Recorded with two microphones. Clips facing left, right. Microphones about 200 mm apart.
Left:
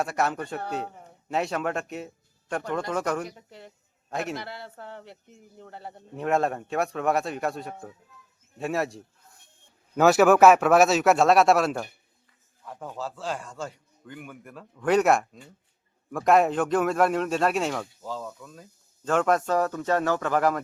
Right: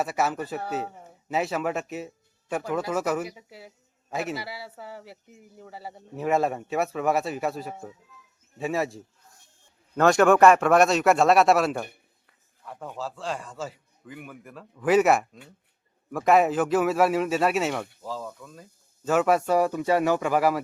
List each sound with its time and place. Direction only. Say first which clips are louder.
0.0 s speech: even; 5° right (ahead or behind)